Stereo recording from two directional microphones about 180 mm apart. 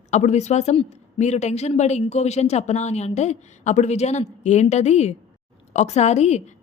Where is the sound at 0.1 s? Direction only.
40° left (ahead or behind).